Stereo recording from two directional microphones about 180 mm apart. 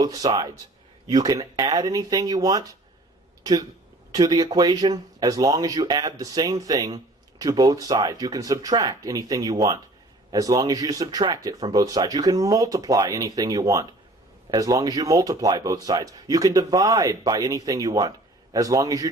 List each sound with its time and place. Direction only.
0.0 s speech: 20° right (ahead or behind)